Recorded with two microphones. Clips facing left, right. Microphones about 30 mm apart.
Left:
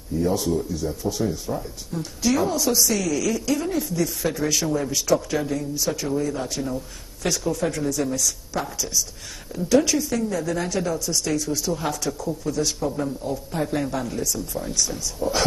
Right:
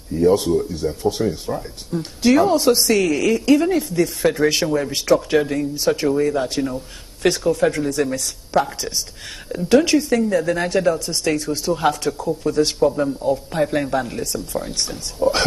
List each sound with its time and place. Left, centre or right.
0.3 s speech: right
4.6 s speech: right
4.9 s speech: right
12.9 s speech: right